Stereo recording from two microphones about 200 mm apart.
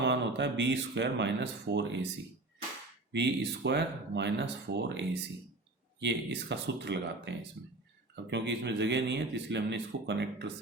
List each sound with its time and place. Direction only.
0.0 s speech: 60° right (ahead or behind)
3.1 s speech: 60° right (ahead or behind)